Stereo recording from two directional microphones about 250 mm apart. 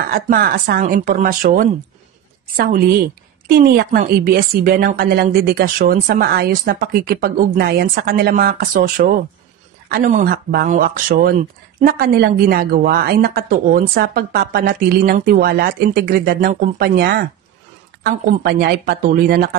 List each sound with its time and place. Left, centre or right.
0.1 s a woman's voice: right